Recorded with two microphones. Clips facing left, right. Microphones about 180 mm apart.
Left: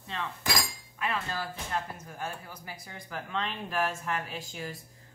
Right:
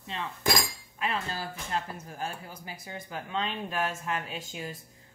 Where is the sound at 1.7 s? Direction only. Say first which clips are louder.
Right 1 dB; 25° right (ahead or behind).